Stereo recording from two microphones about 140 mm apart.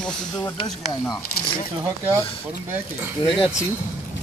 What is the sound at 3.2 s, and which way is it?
Speech, 40° left (ahead or behind).